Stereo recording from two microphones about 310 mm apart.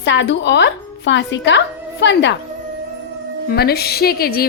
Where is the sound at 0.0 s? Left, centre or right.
Left.